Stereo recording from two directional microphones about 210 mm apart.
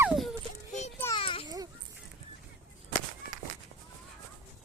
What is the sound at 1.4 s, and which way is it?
Babbling, 15° right (ahead or behind).